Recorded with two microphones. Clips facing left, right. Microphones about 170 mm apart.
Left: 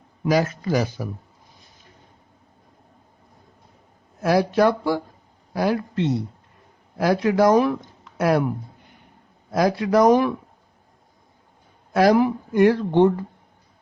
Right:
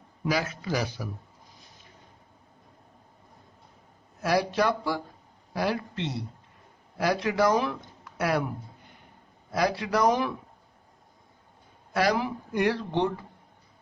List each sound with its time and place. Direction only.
0.3 s speech: 45° left (ahead or behind)
4.2 s speech: 50° left (ahead or behind)
9.5 s speech: 45° left (ahead or behind)
11.9 s speech: 50° left (ahead or behind)